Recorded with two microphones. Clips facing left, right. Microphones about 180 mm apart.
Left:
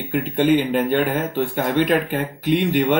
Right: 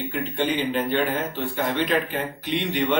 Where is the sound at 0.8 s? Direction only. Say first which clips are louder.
Left 4 dB; 10° left (ahead or behind).